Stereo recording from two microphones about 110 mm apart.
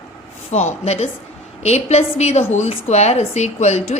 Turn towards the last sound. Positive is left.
turn(degrees=85)